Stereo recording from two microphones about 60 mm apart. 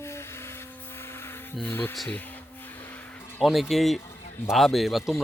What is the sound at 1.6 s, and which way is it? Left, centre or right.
Speech, left.